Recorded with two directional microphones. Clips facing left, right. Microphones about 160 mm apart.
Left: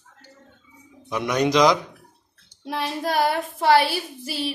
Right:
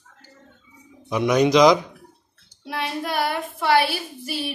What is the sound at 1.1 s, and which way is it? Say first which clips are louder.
Speech: right 4 dB; 5° right (ahead or behind).